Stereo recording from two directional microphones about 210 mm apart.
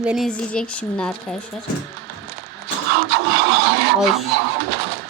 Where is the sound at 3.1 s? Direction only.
50° right (ahead or behind).